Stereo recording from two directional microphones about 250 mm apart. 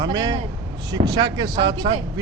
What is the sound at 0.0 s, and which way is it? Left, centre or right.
Speech, centre.